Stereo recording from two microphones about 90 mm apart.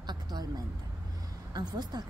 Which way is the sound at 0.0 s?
55° right (ahead or behind).